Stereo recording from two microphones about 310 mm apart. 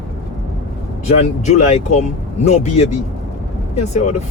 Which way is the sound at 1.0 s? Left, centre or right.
Left.